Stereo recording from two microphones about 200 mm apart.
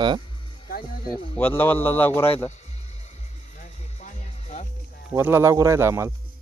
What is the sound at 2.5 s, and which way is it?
Music, 35° left (ahead or behind).